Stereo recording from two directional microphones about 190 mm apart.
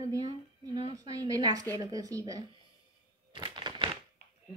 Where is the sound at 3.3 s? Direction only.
25° right (ahead or behind).